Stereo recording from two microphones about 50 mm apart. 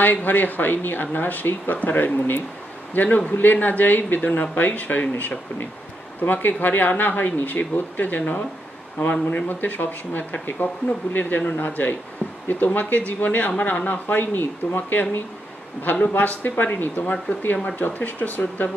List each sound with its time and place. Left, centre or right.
0.0 s a woman's voice: left
6.2 s a woman's voice: left